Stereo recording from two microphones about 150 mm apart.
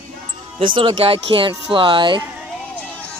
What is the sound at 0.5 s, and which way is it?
Speech, 35° right (ahead or behind).